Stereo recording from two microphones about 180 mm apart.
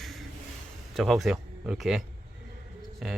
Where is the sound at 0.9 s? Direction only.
Centre (ahead or behind).